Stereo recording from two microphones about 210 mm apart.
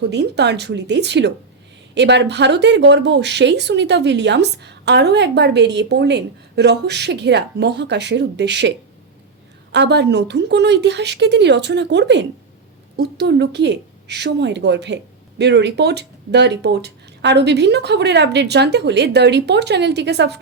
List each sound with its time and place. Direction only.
0.0 s speech: 55° right (ahead or behind)
9.7 s speech: 55° right (ahead or behind)